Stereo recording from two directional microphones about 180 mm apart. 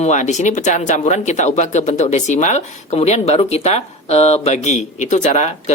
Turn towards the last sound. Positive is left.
turn(degrees=40)  # may be behind; listen again after turning